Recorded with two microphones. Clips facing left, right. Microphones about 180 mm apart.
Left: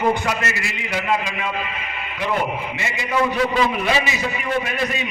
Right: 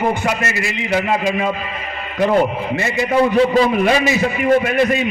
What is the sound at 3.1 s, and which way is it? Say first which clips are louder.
Speech: right 6 dB; 30° right (ahead or behind).